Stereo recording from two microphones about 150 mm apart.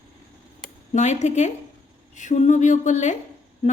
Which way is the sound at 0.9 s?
50° left (ahead or behind).